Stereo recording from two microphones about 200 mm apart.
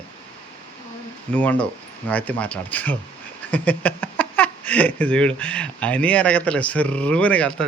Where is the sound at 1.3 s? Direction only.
5° left (ahead or behind).